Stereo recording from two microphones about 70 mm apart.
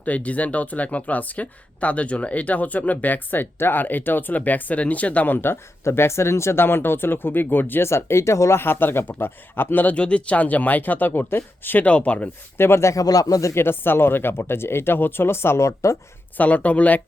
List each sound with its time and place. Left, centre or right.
0.0 s speech: left
11.9 s speech: centre
12.5 s speech: left
13.6 s speech: left
16.4 s speech: centre